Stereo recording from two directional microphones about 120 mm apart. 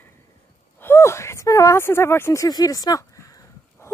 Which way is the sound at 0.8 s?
20° left (ahead or behind).